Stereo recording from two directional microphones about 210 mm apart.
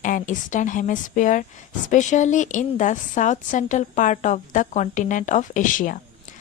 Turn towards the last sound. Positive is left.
turn(degrees=40)  # may be behind; listen again after turning